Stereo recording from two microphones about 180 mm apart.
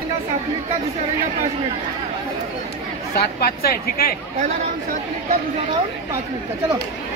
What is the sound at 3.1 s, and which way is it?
Speech, 60° left (ahead or behind).